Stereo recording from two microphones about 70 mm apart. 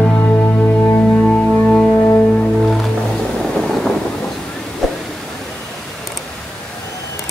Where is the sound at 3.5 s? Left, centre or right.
Centre.